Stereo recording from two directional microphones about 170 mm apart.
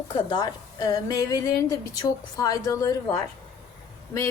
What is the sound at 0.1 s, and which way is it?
A woman's voice, 25° left (ahead or behind).